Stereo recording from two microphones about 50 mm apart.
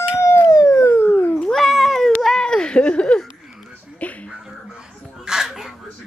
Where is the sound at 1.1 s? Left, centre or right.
Left.